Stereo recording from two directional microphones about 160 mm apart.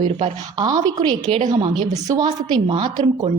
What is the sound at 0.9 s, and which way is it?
A woman's voice, 25° right (ahead or behind).